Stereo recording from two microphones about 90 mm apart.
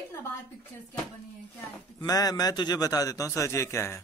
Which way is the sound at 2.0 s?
45° left (ahead or behind).